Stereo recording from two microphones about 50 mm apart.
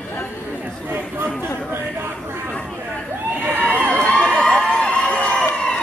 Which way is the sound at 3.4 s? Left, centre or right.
Left.